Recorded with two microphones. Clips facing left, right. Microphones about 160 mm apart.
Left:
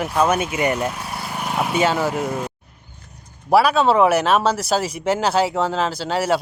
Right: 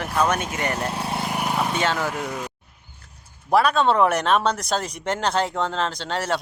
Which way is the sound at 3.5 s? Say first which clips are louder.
Left 3 dB; 5° left (ahead or behind).